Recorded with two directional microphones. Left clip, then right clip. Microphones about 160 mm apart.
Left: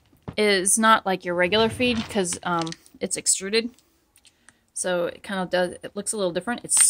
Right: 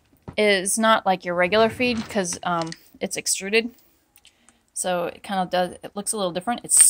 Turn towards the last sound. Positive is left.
turn(degrees=5)  # may be behind; listen again after turning